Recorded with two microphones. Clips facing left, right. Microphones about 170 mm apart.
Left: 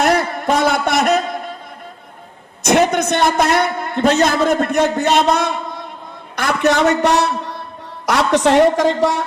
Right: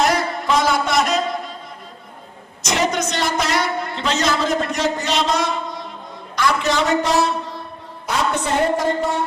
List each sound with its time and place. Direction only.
0.0 s a sound: 60° left (ahead or behind)
2.6 s a man's voice: 55° left (ahead or behind)
8.0 s a woman's voice: 80° left